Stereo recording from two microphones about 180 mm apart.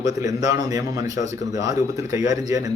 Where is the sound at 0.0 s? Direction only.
20° right (ahead or behind).